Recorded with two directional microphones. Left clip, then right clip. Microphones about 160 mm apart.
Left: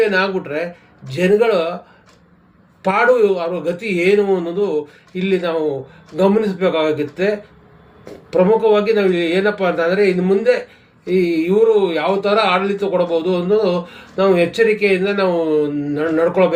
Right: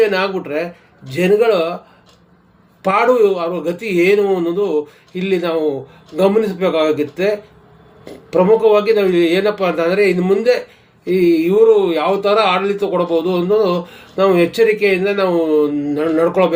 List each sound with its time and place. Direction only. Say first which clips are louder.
0.0 s speech: right 1 dB; 20° right (ahead or behind)
2.8 s speech: right 1 dB; 20° right (ahead or behind)